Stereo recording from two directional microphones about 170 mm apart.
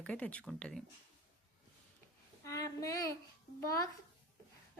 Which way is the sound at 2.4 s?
20° left (ahead or behind).